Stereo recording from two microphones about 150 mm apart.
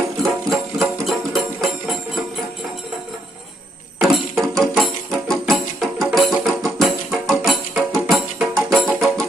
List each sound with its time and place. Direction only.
0.5 s music: centre (ahead or behind)
4.0 s music: centre (ahead or behind)